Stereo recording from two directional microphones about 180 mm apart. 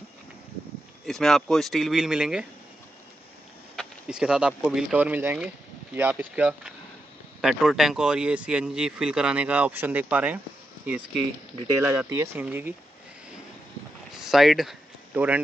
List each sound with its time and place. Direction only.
1.0 s speech: centre (ahead or behind)
3.7 s speech: 5° right (ahead or behind)
11.8 s speech: 15° right (ahead or behind)
14.1 s a sound: centre (ahead or behind)